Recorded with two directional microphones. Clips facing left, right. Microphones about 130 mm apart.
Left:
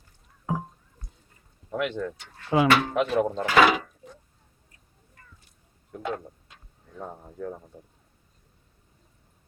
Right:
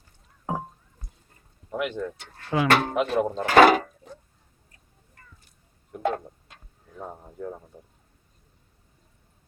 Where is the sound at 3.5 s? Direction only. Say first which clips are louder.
Right 5 dB; 45° right (ahead or behind).